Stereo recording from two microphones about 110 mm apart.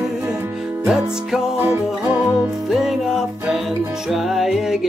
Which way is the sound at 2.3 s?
5° right (ahead or behind).